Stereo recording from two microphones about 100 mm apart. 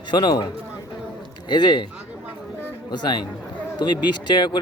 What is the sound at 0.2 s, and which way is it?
Speech, 45° left (ahead or behind).